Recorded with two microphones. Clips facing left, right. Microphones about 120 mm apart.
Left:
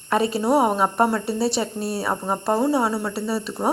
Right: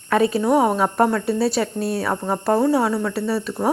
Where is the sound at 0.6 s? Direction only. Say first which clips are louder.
Right 1 dB; 10° left (ahead or behind).